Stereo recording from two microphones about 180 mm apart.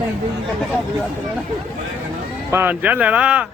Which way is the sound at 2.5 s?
10° right (ahead or behind).